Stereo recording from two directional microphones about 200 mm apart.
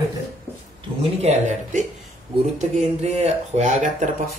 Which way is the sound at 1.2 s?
35° right (ahead or behind).